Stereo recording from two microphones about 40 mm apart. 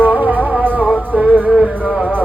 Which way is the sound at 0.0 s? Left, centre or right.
Right.